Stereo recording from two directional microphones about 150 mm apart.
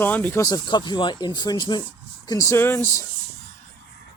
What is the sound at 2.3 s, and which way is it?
Speech, 20° left (ahead or behind).